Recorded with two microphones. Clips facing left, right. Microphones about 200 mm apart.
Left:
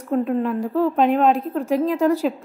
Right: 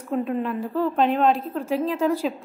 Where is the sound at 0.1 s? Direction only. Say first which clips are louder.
Left 4 dB; centre (ahead or behind).